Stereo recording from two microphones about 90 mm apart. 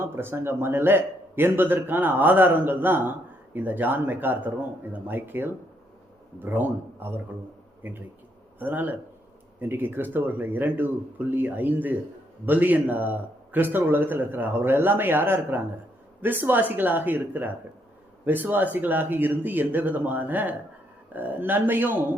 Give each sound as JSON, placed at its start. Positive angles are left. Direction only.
{"t": 0.0, "sound": "a man's voice", "side_deg": -25}